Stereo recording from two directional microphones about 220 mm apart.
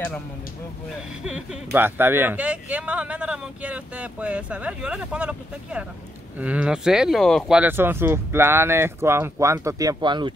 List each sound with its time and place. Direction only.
1.2 s speech: 5° right (ahead or behind); by 10.3 s 20° right (ahead or behind)